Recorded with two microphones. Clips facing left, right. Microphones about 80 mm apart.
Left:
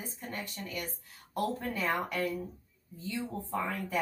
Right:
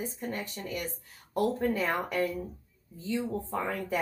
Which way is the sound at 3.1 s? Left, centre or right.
Right.